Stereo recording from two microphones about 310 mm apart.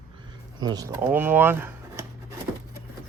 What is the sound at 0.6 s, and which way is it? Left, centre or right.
Speech, centre.